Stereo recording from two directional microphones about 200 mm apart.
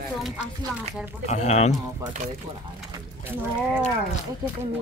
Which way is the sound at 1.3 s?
35° left (ahead or behind).